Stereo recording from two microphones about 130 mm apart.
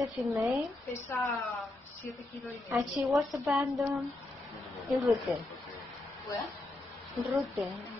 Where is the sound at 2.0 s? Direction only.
10° left (ahead or behind).